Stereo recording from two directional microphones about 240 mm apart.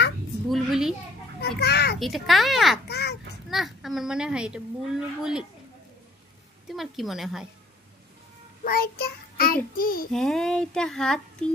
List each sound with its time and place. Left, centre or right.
0.5 s a sound: centre
1.4 s children playing: left
2.0 s a woman's voice: centre
2.9 s a sound: left
3.4 s a woman's voice: centre
6.7 s a woman's voice: centre
8.6 s child singing: left
9.8 s a child's voice: left
10.1 s a woman's voice: centre